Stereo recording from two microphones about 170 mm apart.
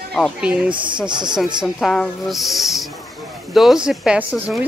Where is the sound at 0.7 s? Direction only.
30° right (ahead or behind).